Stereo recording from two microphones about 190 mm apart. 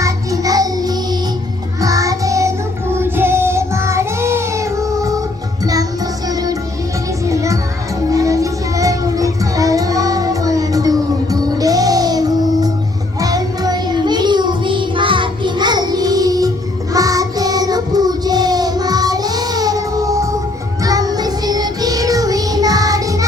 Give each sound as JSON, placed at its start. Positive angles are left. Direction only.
{"t": 0.0, "sound": "music", "side_deg": -20}
{"t": 3.0, "sound": "child singing", "side_deg": -10}
{"t": 6.2, "sound": "music", "side_deg": -20}
{"t": 8.1, "sound": "child singing", "side_deg": -15}
{"t": 20.8, "sound": "music", "side_deg": -20}